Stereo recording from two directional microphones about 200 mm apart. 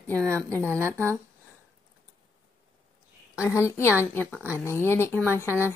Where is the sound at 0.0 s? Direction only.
5° left (ahead or behind).